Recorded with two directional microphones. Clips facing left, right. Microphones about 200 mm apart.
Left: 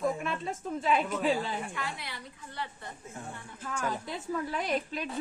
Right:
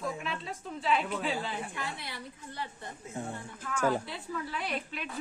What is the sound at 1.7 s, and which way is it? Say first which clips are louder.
Speech: left 1 dB; 25° right (ahead or behind).